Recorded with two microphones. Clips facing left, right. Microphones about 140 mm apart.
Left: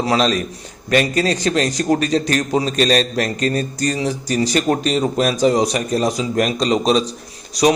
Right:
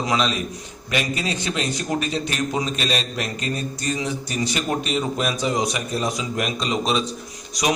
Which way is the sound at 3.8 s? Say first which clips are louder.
Left 5 dB; 35° left (ahead or behind).